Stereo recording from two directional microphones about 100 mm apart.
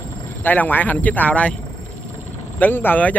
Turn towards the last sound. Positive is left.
turn(degrees=20)  # may be behind; listen again after turning